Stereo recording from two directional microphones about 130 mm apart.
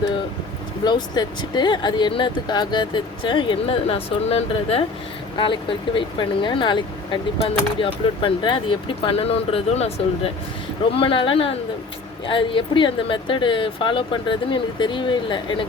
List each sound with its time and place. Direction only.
0.9 s speech: 35° left (ahead or behind); by 4.8 s 50° left (ahead or behind)
5.4 s speech: 40° left (ahead or behind)